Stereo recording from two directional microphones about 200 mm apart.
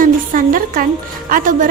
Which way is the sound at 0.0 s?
45° right (ahead or behind).